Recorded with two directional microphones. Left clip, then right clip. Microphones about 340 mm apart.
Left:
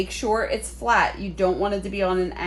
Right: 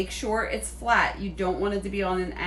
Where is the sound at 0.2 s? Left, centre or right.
Centre.